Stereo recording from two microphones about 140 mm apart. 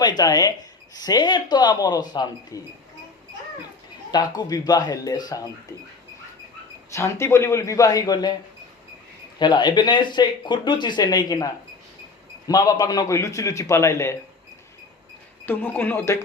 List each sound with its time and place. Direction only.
0.0 s a man's voice: 30° left (ahead or behind)
4.4 s a man's voice: 25° left (ahead or behind)
6.9 s a man's voice: 20° left (ahead or behind)
9.4 s speech: 30° left (ahead or behind)
12.5 s a man's voice: 25° left (ahead or behind)
15.4 s speech: 15° left (ahead or behind)